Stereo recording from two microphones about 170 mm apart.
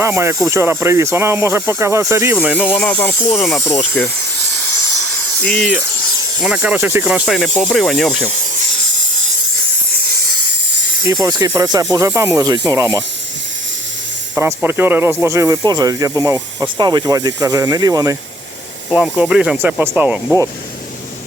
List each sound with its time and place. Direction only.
0.0 s speech: 15° right (ahead or behind)
2.6 s speech: 10° left (ahead or behind)
3.2 s speech: centre (ahead or behind)
3.6 s speech: 15° left (ahead or behind)
5.4 s speech: 5° left (ahead or behind)
7.3 s speech: 5° left (ahead or behind)
9.9 s steam: 60° right (ahead or behind)
11.0 s speech: 20° right (ahead or behind)
14.3 s speech: 15° right (ahead or behind)
18.9 s speech: 5° right (ahead or behind)